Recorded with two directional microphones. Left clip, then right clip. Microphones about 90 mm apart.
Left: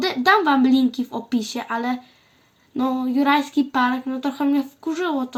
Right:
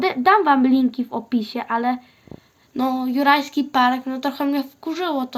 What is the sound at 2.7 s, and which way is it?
Speech, 50° right (ahead or behind).